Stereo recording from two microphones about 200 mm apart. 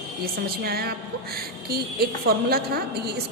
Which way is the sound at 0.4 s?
50° right (ahead or behind).